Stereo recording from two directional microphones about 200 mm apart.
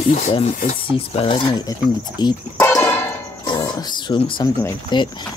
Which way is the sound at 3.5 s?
20° left (ahead or behind).